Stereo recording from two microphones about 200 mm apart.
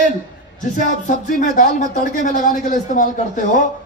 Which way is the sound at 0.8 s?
40° left (ahead or behind).